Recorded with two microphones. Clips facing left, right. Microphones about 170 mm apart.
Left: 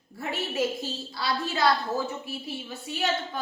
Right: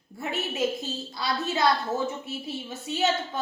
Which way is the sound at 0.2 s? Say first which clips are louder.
Even; 20° right (ahead or behind).